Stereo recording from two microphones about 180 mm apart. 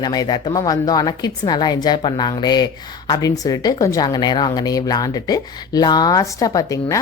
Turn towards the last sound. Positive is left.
turn(degrees=20)  # may be behind; listen again after turning